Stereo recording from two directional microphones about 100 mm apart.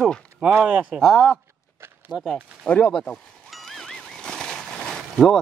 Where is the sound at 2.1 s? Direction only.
10° right (ahead or behind).